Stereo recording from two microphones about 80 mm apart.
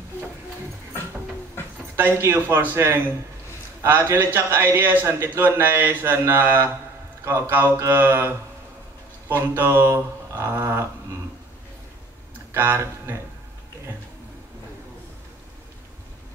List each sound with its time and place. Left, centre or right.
2.0 s a man's voice: right
12.5 s a man's voice: right